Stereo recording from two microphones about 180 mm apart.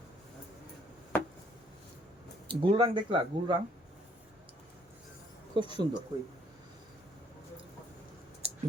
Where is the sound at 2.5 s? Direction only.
30° right (ahead or behind).